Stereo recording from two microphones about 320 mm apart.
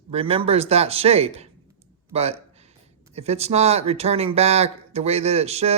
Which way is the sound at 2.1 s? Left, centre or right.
Centre.